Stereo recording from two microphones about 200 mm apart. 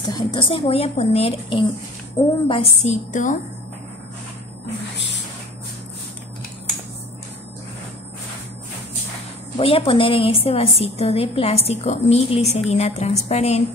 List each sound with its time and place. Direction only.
0.1 s a woman's voice: 25° left (ahead or behind)
9.6 s a woman's voice: 30° left (ahead or behind)